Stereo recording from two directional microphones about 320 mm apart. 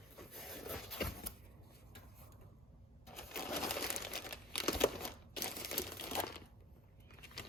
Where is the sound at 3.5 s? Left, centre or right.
Centre.